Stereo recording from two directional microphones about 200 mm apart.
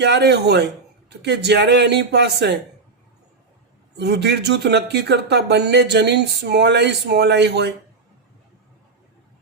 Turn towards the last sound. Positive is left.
turn(degrees=-60)  # may be behind; listen again after turning